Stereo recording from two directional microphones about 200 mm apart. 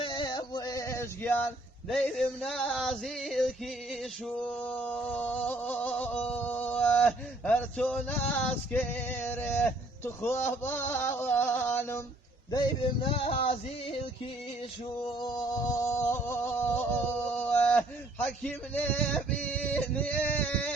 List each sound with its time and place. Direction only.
0.0 s male singing: 25° left (ahead or behind)
1.9 s music: 5° left (ahead or behind)
12.5 s male singing: 25° left (ahead or behind)
15.2 s a sound: 20° left (ahead or behind)
17.3 s male singing: 10° left (ahead or behind)